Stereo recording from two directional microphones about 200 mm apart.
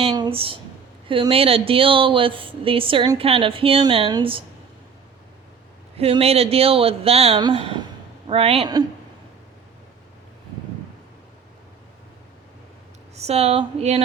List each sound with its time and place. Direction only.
0.0 s a sound: 25° right (ahead or behind)
1.0 s speech: 25° right (ahead or behind)
6.0 s speech: 30° right (ahead or behind)
13.1 s a woman's voice: 30° right (ahead or behind)